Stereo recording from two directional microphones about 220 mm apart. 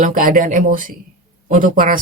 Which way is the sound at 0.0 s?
35° right (ahead or behind).